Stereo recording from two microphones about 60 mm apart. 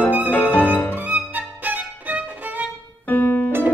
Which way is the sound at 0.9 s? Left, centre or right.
Right.